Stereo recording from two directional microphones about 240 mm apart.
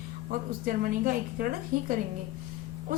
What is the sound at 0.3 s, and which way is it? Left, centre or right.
A woman's voice, right.